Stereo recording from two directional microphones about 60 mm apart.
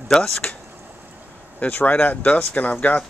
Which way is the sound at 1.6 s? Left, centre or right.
Left.